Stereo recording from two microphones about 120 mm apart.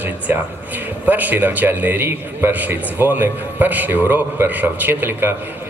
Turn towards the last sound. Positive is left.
turn(degrees=-15)  # may be behind; listen again after turning